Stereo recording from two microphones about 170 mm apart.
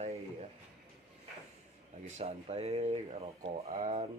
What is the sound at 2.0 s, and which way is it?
Speech, 35° right (ahead or behind).